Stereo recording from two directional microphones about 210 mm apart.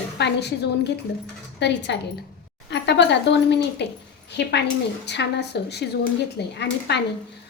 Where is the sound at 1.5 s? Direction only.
55° left (ahead or behind).